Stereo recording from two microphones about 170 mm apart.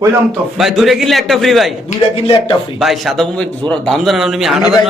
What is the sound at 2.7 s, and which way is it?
A man's voice, centre (ahead or behind).